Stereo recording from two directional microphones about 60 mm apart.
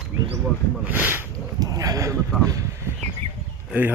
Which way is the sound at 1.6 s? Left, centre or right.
Right.